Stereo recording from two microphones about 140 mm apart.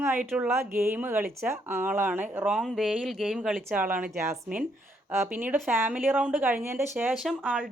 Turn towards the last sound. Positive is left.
turn(degrees=-10)  # may be behind; listen again after turning